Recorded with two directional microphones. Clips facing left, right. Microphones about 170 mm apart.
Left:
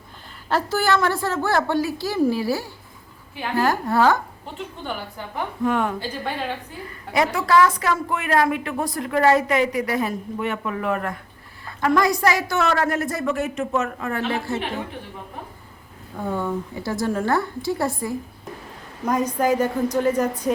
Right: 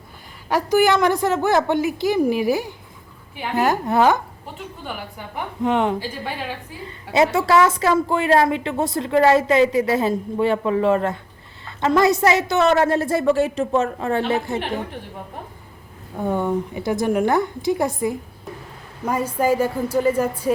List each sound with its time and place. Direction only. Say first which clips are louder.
0.4 s a woman's voice: right 5 dB; 15° right (ahead or behind)
5.6 s a woman's voice: right 3 dB; 20° right (ahead or behind)
7.3 s a woman's voice: right 2 dB; 25° right (ahead or behind)
16.1 s a woman's voice: right 4 dB; 20° right (ahead or behind)